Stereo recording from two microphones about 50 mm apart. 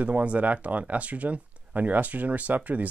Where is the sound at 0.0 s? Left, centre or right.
Right.